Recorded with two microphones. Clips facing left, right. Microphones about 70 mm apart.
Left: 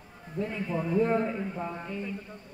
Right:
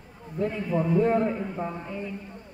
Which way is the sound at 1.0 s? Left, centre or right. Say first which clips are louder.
Right 4 dB; centre.